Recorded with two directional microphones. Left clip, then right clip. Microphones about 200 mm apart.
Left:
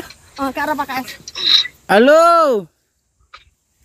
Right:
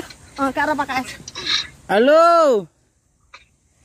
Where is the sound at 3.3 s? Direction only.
20° left (ahead or behind).